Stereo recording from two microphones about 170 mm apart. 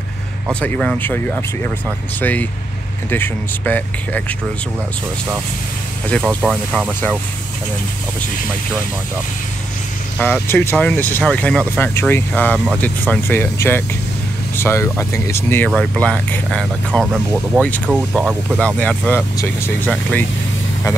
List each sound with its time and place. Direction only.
0.6 s speech: 5° left (ahead or behind)
6.5 s speech: 5° left (ahead or behind)
10.1 s speech: 10° left (ahead or behind)
15.7 s speech: 5° left (ahead or behind)
17.8 s speech: 5° right (ahead or behind)
18.8 s speech: 10° left (ahead or behind)